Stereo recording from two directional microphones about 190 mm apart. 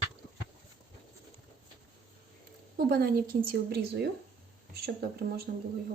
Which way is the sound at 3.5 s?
55° right (ahead or behind).